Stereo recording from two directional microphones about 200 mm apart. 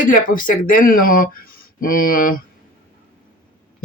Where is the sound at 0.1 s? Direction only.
40° left (ahead or behind).